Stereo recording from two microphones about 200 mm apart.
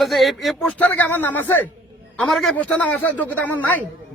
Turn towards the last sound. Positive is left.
turn(degrees=10)  # may be behind; listen again after turning